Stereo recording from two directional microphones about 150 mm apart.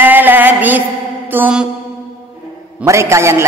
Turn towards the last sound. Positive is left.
turn(degrees=-20)  # may be behind; listen again after turning